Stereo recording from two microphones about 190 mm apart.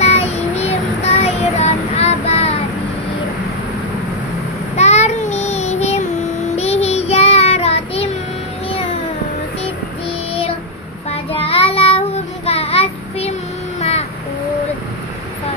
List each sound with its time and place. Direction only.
0.0 s child singing: 35° left (ahead or behind)
4.7 s child singing: 35° left (ahead or behind)
11.1 s child singing: 30° left (ahead or behind)
13.7 s music: 35° left (ahead or behind)